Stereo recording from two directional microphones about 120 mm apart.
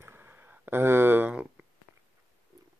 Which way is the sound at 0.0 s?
20° right (ahead or behind).